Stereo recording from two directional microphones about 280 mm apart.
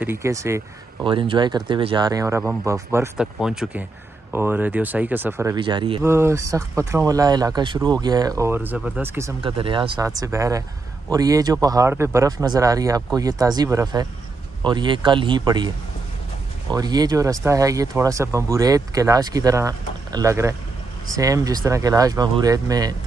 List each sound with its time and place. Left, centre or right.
0.0 s speech: centre
9.4 s speech: centre
16.7 s speech: centre